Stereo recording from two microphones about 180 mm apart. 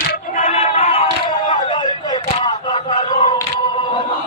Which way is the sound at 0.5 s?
35° left (ahead or behind).